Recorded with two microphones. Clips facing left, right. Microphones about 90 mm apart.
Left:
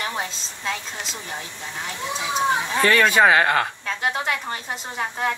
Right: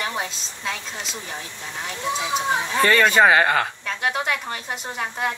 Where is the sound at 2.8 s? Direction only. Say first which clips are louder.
Right 1 dB; 5° left (ahead or behind).